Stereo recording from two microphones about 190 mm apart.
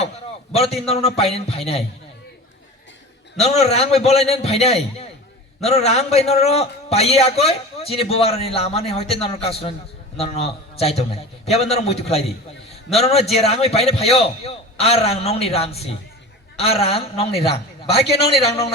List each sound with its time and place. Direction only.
0.5 s a man's voice: 30° left (ahead or behind)
3.3 s a man's voice: 35° left (ahead or behind)
18.4 s a man's voice: 30° left (ahead or behind)